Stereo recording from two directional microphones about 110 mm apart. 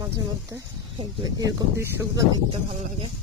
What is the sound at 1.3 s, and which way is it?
Speech, 35° right (ahead or behind).